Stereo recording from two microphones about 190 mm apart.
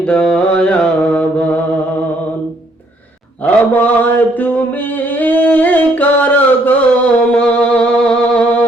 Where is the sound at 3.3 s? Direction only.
10° left (ahead or behind).